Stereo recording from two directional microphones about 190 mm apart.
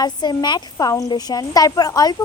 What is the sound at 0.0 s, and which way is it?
A woman's voice, 20° left (ahead or behind).